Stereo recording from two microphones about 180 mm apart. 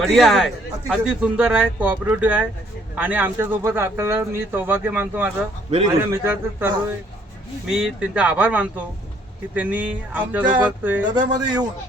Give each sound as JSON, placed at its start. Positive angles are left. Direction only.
{"t": 0.0, "sound": "a man's voice", "side_deg": 0}
{"t": 11.1, "sound": "a man's voice", "side_deg": -25}